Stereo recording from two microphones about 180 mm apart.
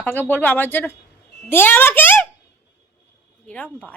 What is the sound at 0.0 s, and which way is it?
A woman's voice, 10° left (ahead or behind).